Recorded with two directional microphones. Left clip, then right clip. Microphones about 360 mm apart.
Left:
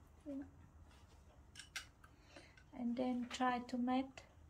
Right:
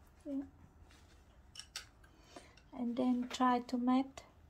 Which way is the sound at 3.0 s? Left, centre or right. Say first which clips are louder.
Right 6 dB; centre.